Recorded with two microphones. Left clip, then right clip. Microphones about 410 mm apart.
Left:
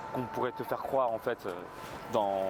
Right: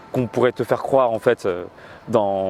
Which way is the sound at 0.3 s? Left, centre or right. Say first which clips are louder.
Right 16 dB; right.